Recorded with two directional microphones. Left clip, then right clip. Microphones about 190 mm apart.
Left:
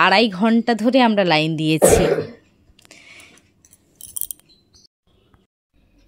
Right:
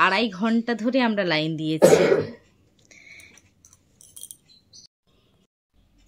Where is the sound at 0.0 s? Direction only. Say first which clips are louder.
Left 6 dB; 45° left (ahead or behind).